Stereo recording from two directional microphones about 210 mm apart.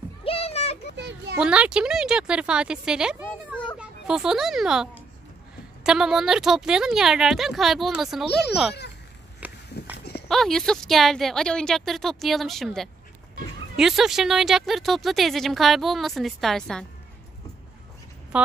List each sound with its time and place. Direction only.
0.2 s children playing: 25° left (ahead or behind)
0.9 s children playing: 55° right (ahead or behind)
1.4 s speech: 5° right (ahead or behind)
9.4 s walk: 5° right (ahead or behind)
10.2 s speech: centre (ahead or behind)
18.3 s a sound: 5° right (ahead or behind)